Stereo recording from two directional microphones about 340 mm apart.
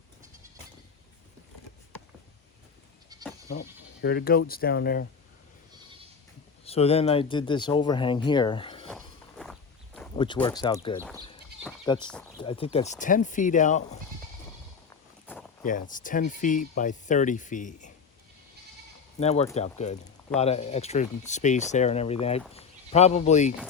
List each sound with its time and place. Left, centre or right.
3.5 s speech: left
6.7 s speech: centre
8.9 s walk: centre
10.2 s speech: centre
15.3 s a sound: centre
15.6 s speech: left
19.2 s speech: centre